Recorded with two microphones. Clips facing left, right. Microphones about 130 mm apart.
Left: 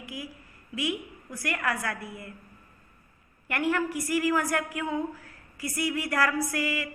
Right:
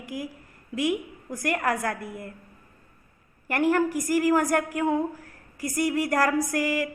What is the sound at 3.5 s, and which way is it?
A woman's voice, 40° right (ahead or behind).